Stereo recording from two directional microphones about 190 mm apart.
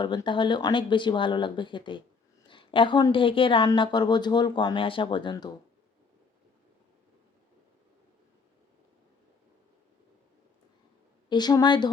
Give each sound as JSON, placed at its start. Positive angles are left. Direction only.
{"t": 0.0, "sound": "a woman's voice", "side_deg": 25}
{"t": 11.3, "sound": "a woman's voice", "side_deg": 20}